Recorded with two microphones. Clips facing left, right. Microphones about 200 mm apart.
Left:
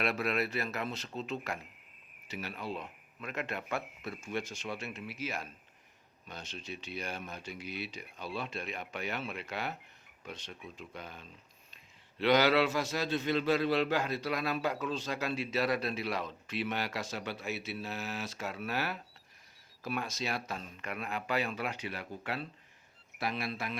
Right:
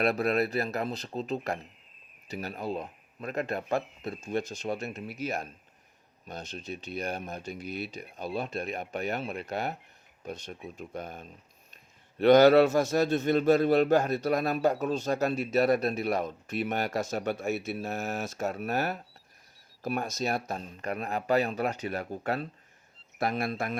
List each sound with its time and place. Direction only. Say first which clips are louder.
0.0 s speech: right 6 dB; 40° right (ahead or behind)
4.0 s speech: right 5 dB; 25° right (ahead or behind)
4.3 s a man's voice: right 7 dB; 40° right (ahead or behind)